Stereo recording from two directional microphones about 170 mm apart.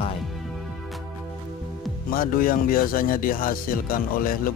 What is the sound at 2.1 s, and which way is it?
Speech, 55° left (ahead or behind).